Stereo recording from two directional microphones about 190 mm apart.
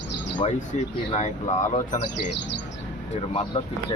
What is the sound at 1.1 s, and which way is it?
Speech, 35° left (ahead or behind).